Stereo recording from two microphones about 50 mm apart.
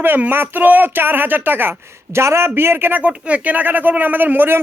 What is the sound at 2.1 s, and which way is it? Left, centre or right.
Speech, right.